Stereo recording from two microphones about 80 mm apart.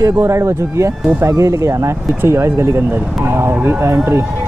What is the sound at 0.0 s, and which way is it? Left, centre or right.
Speech, right.